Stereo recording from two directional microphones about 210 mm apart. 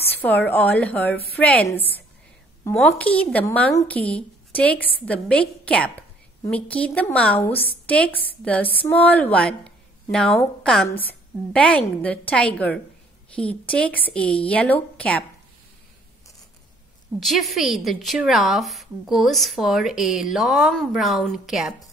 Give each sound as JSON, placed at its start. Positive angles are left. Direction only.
{"t": 0.0, "sound": "speech", "side_deg": 10}
{"t": 17.2, "sound": "a woman's voice", "side_deg": 0}